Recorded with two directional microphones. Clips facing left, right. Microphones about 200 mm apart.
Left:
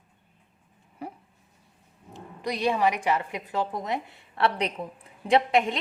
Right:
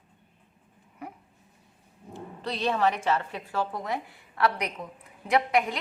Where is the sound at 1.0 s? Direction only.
30° left (ahead or behind).